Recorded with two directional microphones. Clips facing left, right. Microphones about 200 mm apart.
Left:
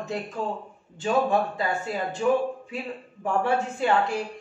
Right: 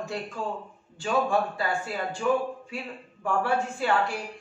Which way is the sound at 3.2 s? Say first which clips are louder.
Left 2 dB; 20° left (ahead or behind).